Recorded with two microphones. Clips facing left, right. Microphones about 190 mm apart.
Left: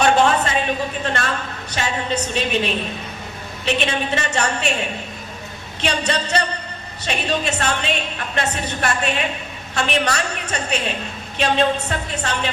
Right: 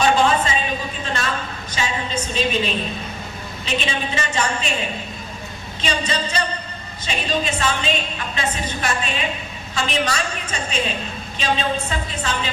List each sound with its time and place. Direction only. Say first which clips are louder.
0.0 s a sound: left 1 dB; 60° left (ahead or behind)
3.7 s a woman's voice: left 4 dB; 60° left (ahead or behind)
5.8 s a woman's voice: left 2 dB; 65° left (ahead or behind)